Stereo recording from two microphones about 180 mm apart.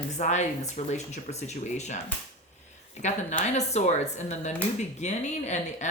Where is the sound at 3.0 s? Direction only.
40° left (ahead or behind).